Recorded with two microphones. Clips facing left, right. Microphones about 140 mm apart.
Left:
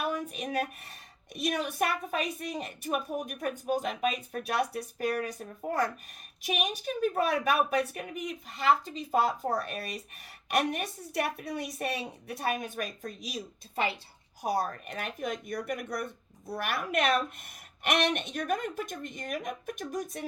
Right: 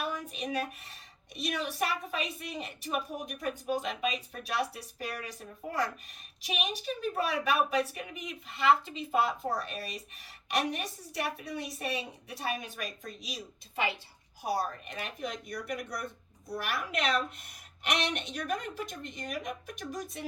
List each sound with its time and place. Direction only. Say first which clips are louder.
0.0 s a woman's voice: left 3 dB; 50° left (ahead or behind)